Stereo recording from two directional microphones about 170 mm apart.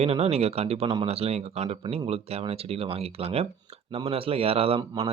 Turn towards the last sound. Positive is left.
turn(degrees=-35)  # may be behind; listen again after turning